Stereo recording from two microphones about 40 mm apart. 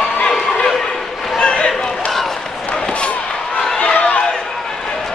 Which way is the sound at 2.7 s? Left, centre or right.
Left.